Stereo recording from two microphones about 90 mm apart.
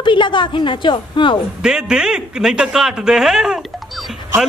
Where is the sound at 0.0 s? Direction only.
65° left (ahead or behind).